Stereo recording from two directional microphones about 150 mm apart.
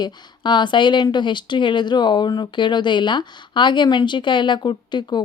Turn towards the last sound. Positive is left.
turn(degrees=30)  # may be behind; listen again after turning